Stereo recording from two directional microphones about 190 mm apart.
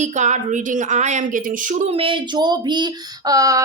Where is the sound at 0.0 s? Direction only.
40° right (ahead or behind).